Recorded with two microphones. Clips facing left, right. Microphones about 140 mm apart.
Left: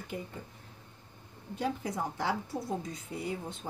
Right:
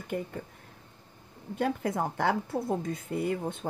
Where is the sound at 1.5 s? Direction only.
55° right (ahead or behind).